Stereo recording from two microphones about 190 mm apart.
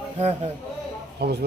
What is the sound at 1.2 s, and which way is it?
Speech, 60° right (ahead or behind).